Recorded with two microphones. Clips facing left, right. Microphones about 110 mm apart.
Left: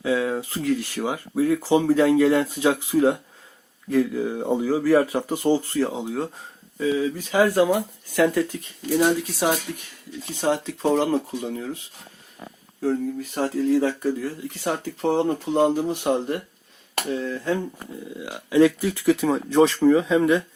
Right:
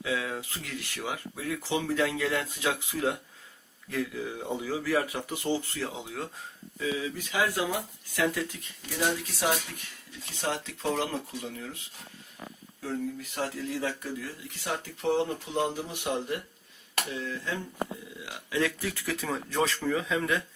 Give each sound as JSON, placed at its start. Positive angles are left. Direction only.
{"t": 0.0, "sound": "speech", "side_deg": 35}
{"t": 8.9, "sound": "speech", "side_deg": 30}
{"t": 12.8, "sound": "speech", "side_deg": 40}
{"t": 18.2, "sound": "speech", "side_deg": 25}